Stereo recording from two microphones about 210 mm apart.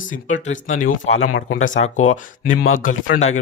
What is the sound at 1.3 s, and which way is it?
Speech, 70° left (ahead or behind).